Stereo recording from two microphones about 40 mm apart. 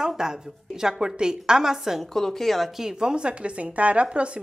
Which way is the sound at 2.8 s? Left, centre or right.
Centre.